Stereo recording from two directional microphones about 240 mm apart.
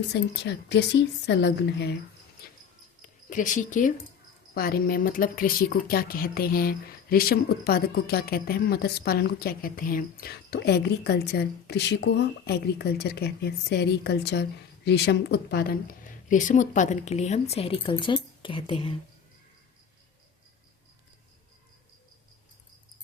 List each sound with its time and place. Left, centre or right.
0.1 s speech: left
2.4 s dog: left
3.2 s a woman's voice: left